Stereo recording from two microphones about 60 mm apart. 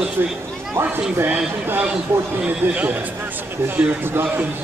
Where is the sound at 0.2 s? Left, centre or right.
Right.